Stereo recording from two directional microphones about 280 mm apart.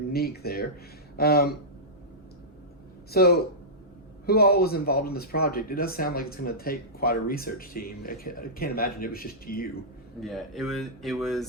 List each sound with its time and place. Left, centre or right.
0.1 s speech: left
3.1 s speech: left
10.2 s speech: centre